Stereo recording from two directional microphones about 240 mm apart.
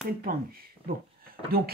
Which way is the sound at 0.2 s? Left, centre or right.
Right.